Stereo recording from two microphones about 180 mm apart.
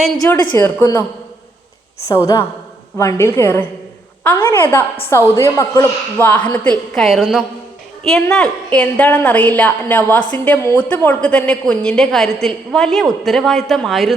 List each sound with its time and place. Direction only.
0.5 s a woman's voice: 10° left (ahead or behind)
2.0 s a woman's voice: 15° left (ahead or behind); by 14.1 s centre (ahead or behind)